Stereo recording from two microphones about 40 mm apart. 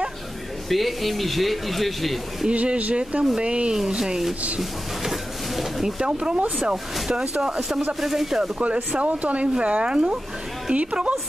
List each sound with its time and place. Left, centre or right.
0.7 s speech: centre
2.5 s speech: right
3.7 s speech: centre
4.6 s a sound: centre
6.0 s speech: right
8.0 s speech: centre
8.9 s speech: right